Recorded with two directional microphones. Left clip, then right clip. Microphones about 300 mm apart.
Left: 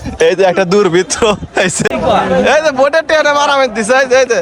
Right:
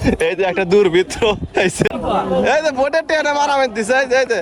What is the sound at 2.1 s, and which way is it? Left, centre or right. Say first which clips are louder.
Speech: left 8 dB; left.